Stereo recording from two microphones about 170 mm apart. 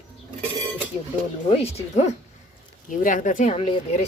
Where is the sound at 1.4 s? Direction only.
35° left (ahead or behind).